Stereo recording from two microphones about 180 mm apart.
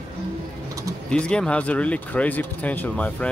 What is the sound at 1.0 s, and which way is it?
Speech, 5° left (ahead or behind).